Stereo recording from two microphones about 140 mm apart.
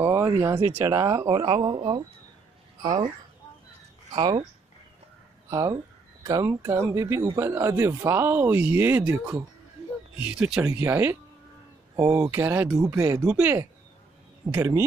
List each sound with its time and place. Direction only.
0.0 s speech: 15° right (ahead or behind)
1.4 s speech: 35° right (ahead or behind)
4.1 s speech: 30° right (ahead or behind)
5.5 s speech: 25° right (ahead or behind)
13.2 s speech: 10° right (ahead or behind)